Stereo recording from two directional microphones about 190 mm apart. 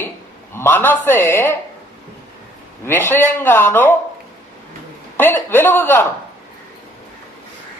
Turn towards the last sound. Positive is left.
turn(degrees=10)  # may be behind; listen again after turning